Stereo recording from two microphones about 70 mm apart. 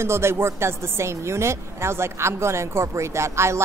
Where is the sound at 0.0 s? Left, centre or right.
Right.